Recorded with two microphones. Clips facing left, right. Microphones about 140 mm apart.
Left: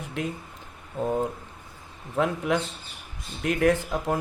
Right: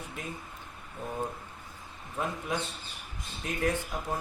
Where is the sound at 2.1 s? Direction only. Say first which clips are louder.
Left 8 dB; 80° left.